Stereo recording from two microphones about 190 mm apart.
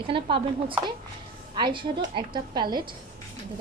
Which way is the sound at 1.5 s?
25° right (ahead or behind).